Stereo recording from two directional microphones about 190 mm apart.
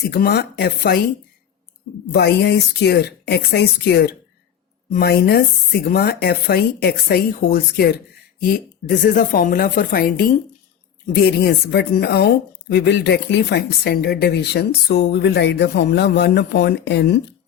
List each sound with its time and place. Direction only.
0.1 s speech: 55° left (ahead or behind)
2.1 s speech: 60° left (ahead or behind)
9.1 s speech: 50° left (ahead or behind)